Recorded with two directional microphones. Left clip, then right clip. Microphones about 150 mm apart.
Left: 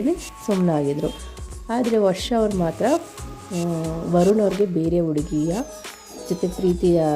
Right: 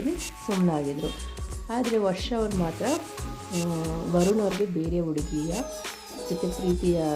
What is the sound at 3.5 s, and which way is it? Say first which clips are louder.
Speech: left 4 dB; centre (ahead or behind).